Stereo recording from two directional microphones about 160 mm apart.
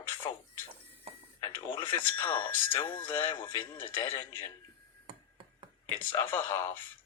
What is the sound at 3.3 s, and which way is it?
Speech, 30° left (ahead or behind).